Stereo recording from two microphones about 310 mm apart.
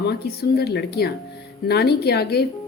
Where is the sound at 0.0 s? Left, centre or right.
Left.